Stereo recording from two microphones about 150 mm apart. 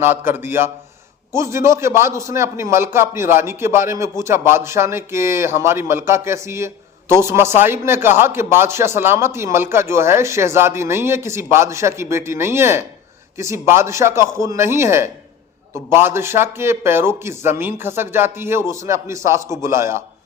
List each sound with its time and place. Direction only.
0.0 s a man's voice: 15° right (ahead or behind)